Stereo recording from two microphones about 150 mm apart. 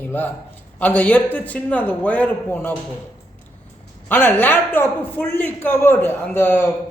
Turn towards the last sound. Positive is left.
turn(degrees=15)  # may be behind; listen again after turning